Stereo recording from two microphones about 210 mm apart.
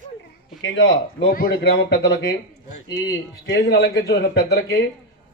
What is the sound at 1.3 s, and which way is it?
Speech, 45° left (ahead or behind).